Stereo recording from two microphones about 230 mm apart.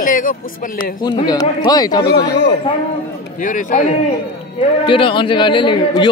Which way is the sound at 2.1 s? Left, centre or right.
Left.